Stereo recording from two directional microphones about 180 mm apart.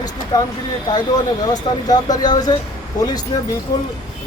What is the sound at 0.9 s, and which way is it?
Speech, 20° left (ahead or behind).